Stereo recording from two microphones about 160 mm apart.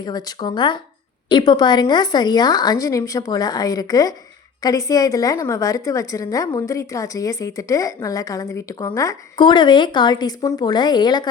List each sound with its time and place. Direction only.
0.0 s a woman's voice: 25° left (ahead or behind)